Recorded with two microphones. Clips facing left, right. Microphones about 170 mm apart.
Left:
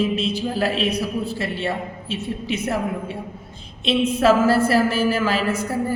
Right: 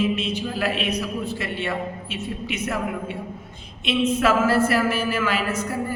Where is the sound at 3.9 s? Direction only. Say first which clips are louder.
Left 3 dB; 30° left (ahead or behind).